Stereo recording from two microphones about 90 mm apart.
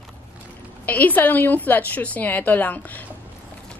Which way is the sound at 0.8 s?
20° left (ahead or behind).